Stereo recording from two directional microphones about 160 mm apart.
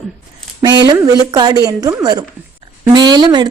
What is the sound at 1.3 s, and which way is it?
A woman's voice, 25° right (ahead or behind).